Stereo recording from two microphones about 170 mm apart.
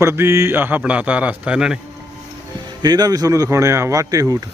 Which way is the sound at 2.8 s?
25° right (ahead or behind).